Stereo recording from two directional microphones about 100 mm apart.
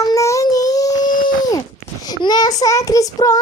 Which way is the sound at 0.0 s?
35° left (ahead or behind).